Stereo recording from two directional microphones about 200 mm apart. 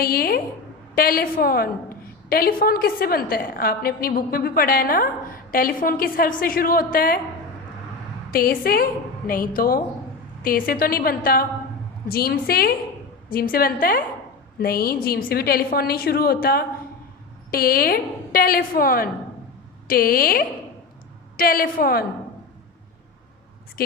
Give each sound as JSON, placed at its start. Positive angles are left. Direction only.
{"t": 0.0, "sound": "a woman's voice", "side_deg": 50}
{"t": 8.3, "sound": "a woman's voice", "side_deg": 45}